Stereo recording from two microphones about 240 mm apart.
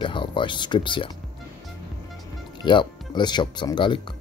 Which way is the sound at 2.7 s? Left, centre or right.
Centre.